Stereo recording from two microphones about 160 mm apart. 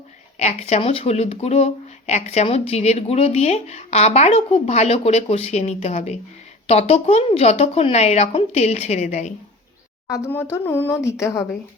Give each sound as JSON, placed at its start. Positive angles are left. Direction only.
{"t": 0.3, "sound": "speech", "side_deg": 45}
{"t": 10.1, "sound": "speech", "side_deg": 15}